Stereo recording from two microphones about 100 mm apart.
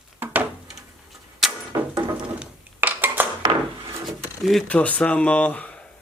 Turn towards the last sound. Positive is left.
turn(degrees=15)  # may be behind; listen again after turning